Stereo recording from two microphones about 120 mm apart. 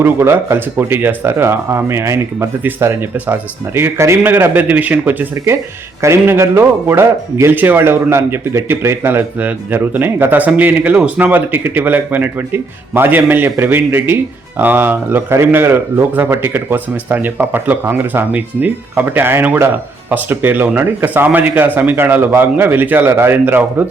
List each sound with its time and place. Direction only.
0.0 s a man's voice: 20° right (ahead or behind)